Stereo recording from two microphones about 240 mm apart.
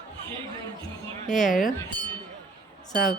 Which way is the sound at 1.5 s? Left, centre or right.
Left.